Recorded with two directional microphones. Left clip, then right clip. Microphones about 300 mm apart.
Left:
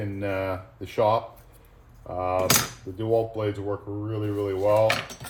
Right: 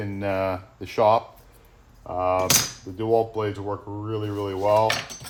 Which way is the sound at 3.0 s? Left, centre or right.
Centre.